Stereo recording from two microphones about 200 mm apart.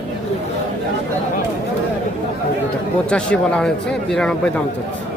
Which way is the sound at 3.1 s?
5° left (ahead or behind).